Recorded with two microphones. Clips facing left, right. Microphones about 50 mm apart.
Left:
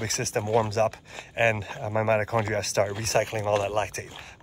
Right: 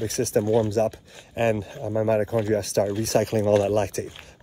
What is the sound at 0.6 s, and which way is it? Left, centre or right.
Speech, left.